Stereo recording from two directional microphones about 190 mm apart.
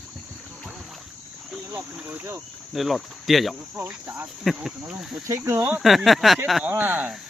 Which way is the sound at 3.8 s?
10° right (ahead or behind).